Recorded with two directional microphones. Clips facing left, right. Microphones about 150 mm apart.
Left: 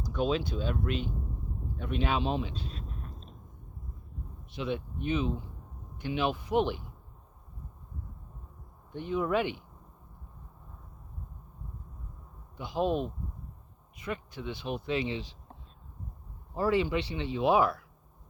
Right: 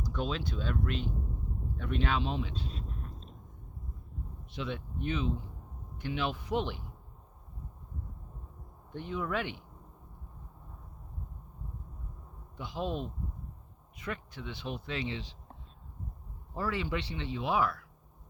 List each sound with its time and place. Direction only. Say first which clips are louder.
0.2 s speech: left 6 dB; 10° left (ahead or behind)
4.5 s speech: left 4 dB; 10° left (ahead or behind)
9.0 s speech: left 5 dB; 10° left (ahead or behind)
12.5 s speech: left 6 dB; 10° left (ahead or behind)
14.1 s speech: left 3 dB; 10° left (ahead or behind)
16.6 s speech: left 6 dB; 20° left (ahead or behind)